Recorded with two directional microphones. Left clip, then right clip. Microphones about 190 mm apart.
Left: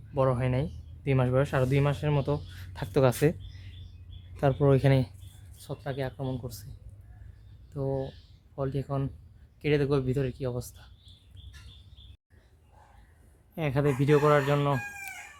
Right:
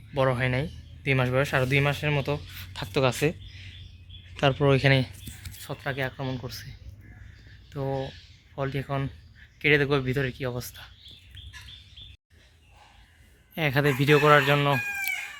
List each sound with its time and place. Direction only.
0.1 s speech: 5° left (ahead or behind)
2.6 s speech: 30° left (ahead or behind)
4.4 s speech: 5° left (ahead or behind)
5.6 s speech: 5° right (ahead or behind)
7.8 s speech: 20° right (ahead or behind)
8.5 s speech: centre (ahead or behind)
13.6 s speech: 10° right (ahead or behind)